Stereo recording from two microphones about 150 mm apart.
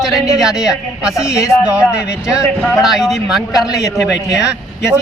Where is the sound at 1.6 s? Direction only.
5° right (ahead or behind).